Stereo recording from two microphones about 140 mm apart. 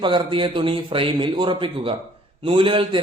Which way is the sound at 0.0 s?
35° right (ahead or behind).